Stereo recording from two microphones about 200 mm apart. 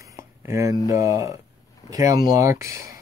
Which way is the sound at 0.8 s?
15° right (ahead or behind).